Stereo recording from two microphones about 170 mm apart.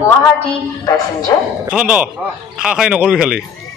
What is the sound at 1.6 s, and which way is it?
Speech, 5° right (ahead or behind).